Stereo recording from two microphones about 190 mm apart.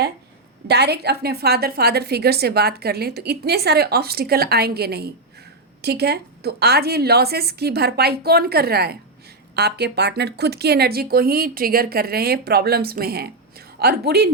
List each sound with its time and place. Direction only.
0.7 s a woman's voice: 60° right (ahead or behind)